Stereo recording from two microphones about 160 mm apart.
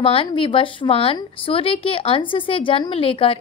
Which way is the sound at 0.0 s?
35° left (ahead or behind).